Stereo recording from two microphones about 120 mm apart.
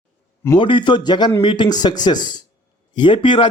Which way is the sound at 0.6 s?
45° left (ahead or behind).